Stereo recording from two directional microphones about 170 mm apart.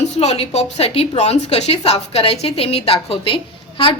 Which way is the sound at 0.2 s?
40° left (ahead or behind).